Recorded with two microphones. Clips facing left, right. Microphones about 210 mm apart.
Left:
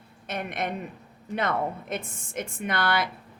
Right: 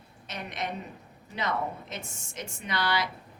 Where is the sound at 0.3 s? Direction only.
55° left (ahead or behind).